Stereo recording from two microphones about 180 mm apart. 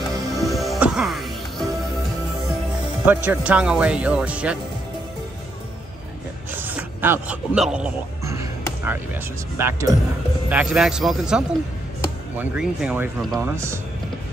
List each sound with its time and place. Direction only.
0.4 s music: centre (ahead or behind)
3.1 s speech: 10° right (ahead or behind)
6.5 s speech: 10° right (ahead or behind)
8.3 s music: 15° right (ahead or behind)
9.6 s a man's voice: 15° right (ahead or behind)